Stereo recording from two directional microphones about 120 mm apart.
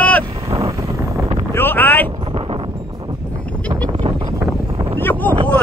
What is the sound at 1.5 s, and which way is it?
Boat, 20° left (ahead or behind).